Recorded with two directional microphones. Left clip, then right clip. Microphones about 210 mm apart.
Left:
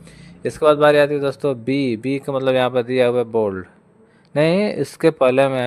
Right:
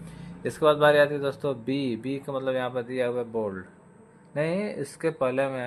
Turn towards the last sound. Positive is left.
turn(degrees=40)  # may be behind; listen again after turning